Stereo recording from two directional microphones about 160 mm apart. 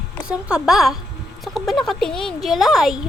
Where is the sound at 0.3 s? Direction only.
5° right (ahead or behind).